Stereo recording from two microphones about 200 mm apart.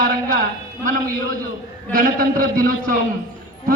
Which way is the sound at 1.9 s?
45° right (ahead or behind).